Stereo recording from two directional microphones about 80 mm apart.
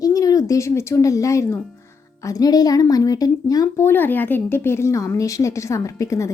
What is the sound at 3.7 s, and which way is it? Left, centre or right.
Speech, left.